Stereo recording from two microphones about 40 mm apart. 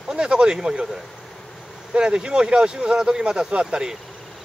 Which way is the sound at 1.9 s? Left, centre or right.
Right.